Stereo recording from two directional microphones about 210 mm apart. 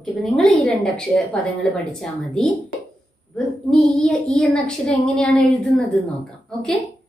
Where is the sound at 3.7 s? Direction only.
Centre (ahead or behind).